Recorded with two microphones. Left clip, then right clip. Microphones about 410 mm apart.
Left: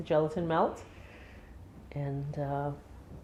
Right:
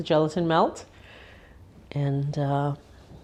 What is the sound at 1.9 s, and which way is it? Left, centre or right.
Speech, right.